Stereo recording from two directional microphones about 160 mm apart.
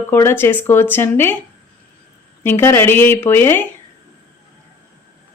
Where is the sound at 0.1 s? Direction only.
15° left (ahead or behind).